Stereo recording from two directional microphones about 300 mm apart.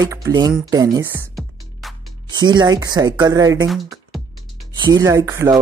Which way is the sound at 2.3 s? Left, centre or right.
Centre.